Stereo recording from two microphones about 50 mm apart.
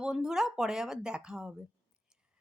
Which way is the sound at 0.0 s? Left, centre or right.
Centre.